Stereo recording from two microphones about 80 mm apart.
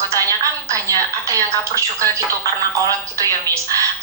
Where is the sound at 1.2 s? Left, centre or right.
Right.